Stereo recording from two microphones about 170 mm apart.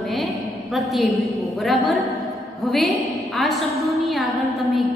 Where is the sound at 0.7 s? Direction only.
Centre (ahead or behind).